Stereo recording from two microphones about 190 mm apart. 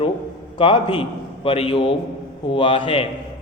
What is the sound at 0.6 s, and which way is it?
A man's voice, 25° left (ahead or behind).